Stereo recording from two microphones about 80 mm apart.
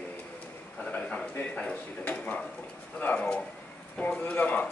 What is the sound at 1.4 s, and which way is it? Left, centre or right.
Speech, centre.